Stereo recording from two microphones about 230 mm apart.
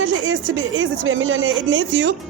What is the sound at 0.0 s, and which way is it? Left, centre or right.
A woman's voice, right.